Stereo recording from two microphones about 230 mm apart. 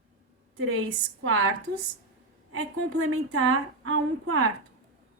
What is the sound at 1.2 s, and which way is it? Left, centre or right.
Speech, right.